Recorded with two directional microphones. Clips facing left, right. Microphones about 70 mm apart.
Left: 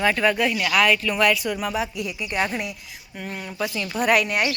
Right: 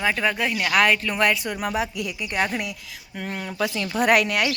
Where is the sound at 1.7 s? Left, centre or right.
Right.